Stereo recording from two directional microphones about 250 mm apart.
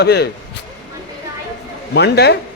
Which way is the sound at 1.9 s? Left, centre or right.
Left.